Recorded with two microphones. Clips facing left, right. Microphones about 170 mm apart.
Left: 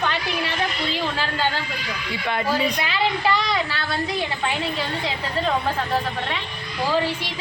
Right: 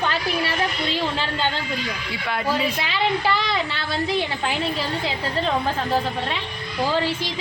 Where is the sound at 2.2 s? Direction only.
Centre (ahead or behind).